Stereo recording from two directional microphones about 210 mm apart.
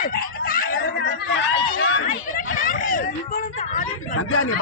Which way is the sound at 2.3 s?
40° left (ahead or behind).